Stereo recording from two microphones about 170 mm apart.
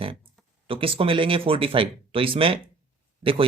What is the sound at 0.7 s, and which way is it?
Speech, 30° right (ahead or behind).